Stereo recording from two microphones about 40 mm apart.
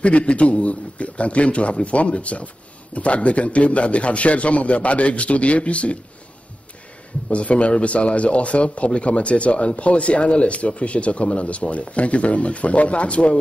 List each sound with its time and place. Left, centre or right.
0.0 s speech: left
7.2 s speech: left